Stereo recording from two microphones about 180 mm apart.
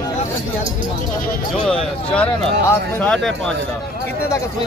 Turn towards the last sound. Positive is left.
turn(degrees=5)  # may be behind; listen again after turning